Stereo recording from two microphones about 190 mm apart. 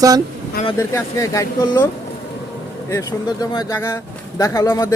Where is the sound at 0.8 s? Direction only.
15° left (ahead or behind).